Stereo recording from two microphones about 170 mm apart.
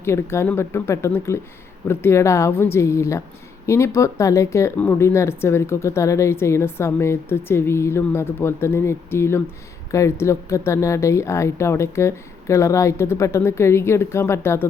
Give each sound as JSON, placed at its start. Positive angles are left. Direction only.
{"t": 0.0, "sound": "speech", "side_deg": 15}